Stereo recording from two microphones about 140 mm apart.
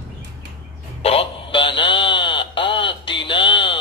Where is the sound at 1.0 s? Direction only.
40° left (ahead or behind).